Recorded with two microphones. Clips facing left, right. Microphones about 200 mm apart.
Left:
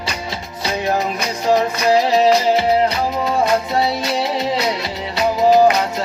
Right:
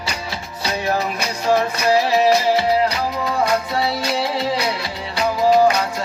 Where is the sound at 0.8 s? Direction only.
20° left (ahead or behind).